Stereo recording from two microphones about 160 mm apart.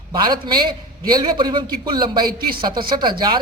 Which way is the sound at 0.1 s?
25° right (ahead or behind).